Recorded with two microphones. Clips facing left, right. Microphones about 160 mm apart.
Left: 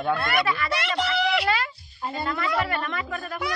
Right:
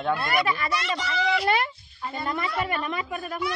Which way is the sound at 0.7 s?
65° left (ahead or behind).